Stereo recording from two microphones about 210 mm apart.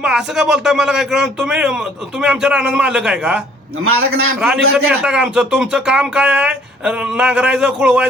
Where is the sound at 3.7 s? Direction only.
85° right.